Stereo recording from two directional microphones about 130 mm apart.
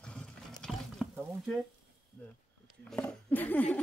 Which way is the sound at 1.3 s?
Centre (ahead or behind).